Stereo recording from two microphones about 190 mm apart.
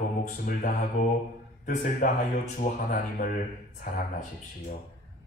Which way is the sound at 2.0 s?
45° left (ahead or behind).